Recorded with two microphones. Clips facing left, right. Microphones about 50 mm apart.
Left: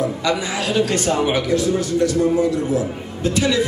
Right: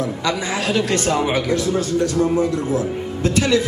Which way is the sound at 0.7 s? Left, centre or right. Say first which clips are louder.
Left 1 dB; right.